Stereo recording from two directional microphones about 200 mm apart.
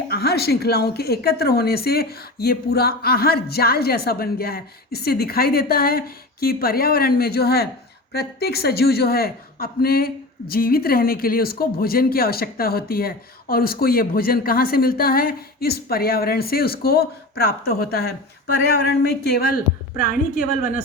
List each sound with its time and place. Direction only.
0.1 s speech: 50° left (ahead or behind)
20.0 s speech: 45° left (ahead or behind)